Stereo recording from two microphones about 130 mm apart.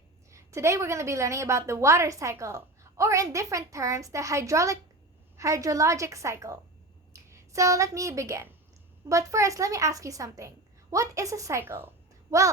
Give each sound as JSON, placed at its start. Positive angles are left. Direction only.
{"t": 0.3, "sound": "a woman's voice", "side_deg": -20}